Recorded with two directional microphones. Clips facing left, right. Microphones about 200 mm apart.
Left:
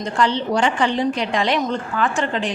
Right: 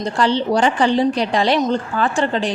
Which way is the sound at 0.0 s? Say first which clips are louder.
Right 2 dB; 35° right (ahead or behind).